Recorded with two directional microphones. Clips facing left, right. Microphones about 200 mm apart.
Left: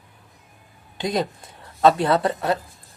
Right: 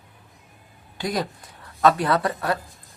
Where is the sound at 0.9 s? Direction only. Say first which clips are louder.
Left 3 dB; 20° left (ahead or behind).